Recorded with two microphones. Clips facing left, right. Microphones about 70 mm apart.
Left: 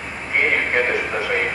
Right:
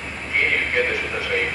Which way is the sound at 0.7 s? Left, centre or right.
Left.